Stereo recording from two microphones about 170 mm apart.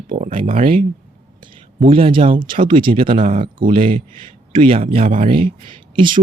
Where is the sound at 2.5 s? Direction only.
55° right (ahead or behind).